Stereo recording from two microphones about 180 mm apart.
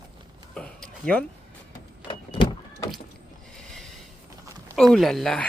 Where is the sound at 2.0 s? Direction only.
30° left (ahead or behind).